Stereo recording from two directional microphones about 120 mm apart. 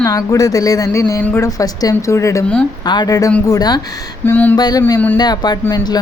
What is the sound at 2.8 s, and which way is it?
Speech, 35° left (ahead or behind).